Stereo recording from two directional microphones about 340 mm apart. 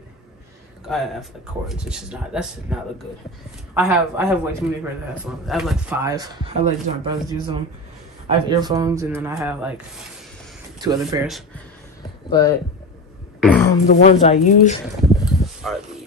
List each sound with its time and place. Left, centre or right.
0.8 s speech: centre
10.8 s speech: centre
12.3 s speech: centre
13.4 s a sound: centre
13.8 s speech: left
15.2 s a sound: centre